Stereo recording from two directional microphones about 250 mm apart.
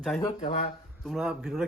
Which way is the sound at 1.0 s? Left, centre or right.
Centre.